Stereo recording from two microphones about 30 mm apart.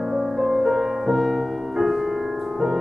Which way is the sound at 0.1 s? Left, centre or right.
Centre.